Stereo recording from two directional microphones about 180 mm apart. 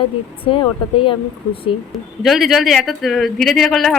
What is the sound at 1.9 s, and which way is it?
Speech, centre (ahead or behind).